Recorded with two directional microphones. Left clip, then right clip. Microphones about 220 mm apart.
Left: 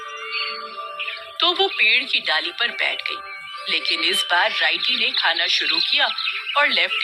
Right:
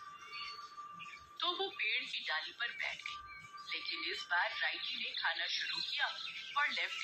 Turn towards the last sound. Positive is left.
turn(degrees=45)  # may be behind; listen again after turning